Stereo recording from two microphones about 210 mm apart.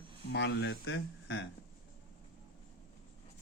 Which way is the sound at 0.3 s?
55° left (ahead or behind).